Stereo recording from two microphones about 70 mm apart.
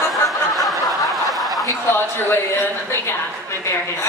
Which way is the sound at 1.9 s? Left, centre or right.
Left.